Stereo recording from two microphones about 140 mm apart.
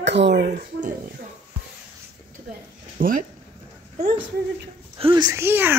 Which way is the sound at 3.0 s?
85° right.